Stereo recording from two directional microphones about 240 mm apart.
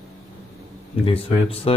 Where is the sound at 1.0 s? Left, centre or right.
Left.